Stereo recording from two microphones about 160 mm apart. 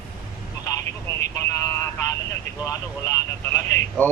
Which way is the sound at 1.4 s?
15° left (ahead or behind).